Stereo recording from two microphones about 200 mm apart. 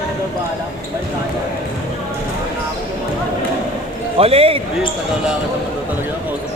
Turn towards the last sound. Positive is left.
turn(degrees=-30)  # may be behind; listen again after turning